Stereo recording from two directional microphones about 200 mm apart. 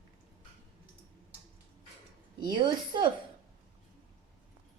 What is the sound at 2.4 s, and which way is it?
Speech, 25° right (ahead or behind).